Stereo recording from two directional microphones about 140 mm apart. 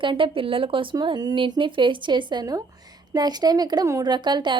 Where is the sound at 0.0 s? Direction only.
35° right (ahead or behind).